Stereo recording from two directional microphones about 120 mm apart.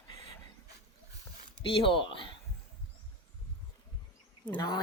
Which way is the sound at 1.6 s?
45° left (ahead or behind).